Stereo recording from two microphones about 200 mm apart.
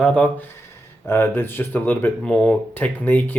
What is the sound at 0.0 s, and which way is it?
Speech, 5° left (ahead or behind).